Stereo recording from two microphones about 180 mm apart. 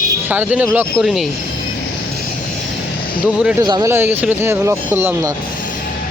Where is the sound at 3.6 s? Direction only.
25° right (ahead or behind).